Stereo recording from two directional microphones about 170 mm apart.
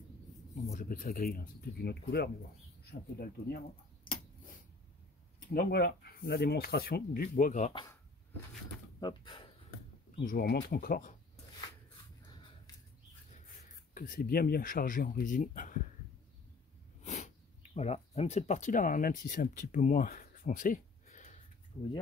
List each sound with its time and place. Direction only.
0.7 s speech: 50° left (ahead or behind); by 3.6 s 65° left (ahead or behind)
5.5 s speech: 65° left (ahead or behind); by 7.7 s 50° left (ahead or behind)
7.7 s speech: 20° left (ahead or behind)
9.0 s speech: 25° left (ahead or behind)
10.2 s speech: 65° left (ahead or behind)
13.9 s speech: 55° left (ahead or behind)
17.0 s speech: 45° left (ahead or behind)
21.7 s speech: 15° left (ahead or behind)